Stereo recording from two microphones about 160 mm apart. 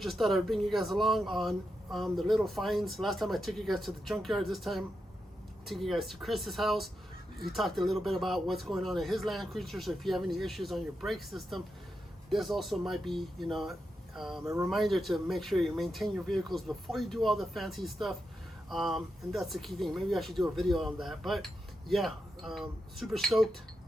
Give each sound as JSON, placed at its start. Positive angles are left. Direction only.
{"t": 0.0, "sound": "speech", "side_deg": 0}
{"t": 14.4, "sound": "speech", "side_deg": -15}
{"t": 14.7, "sound": "speech", "side_deg": 0}